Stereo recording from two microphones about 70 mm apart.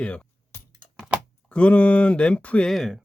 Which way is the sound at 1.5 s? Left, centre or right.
Centre.